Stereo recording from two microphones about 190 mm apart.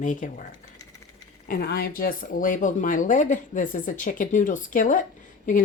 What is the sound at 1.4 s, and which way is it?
Speech, 50° left (ahead or behind).